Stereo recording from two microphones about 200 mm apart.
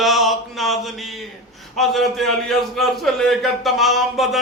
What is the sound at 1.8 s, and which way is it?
A man's voice, centre (ahead or behind).